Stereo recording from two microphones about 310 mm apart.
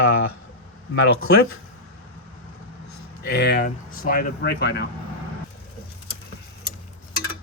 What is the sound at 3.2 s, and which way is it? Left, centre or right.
Speech, left.